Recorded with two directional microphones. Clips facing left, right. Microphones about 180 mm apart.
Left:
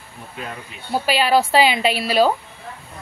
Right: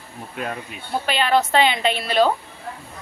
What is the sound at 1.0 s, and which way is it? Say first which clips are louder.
A woman's voice: left 2 dB; 10° left (ahead or behind).